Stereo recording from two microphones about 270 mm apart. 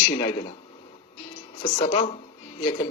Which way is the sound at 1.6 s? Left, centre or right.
Left.